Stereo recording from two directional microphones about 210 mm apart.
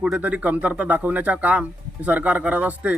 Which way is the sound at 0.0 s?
5° right (ahead or behind).